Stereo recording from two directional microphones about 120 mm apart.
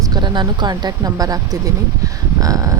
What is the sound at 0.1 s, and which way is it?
Speech, 35° right (ahead or behind).